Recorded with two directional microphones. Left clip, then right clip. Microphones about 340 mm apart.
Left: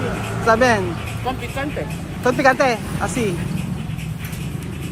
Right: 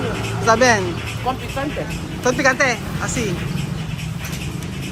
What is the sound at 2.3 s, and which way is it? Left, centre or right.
Speech, centre.